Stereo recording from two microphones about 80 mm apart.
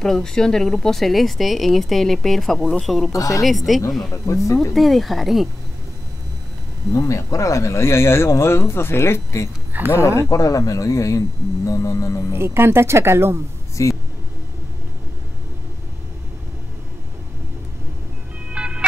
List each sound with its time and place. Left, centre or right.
0.0 s speech: centre
3.1 s speech: left
3.4 s speech: centre
4.1 s speech: left
4.7 s speech: centre
6.9 s speech: left
9.7 s speech: right
9.9 s speech: left
12.3 s speech: right
13.8 s speech: left
18.5 s music: centre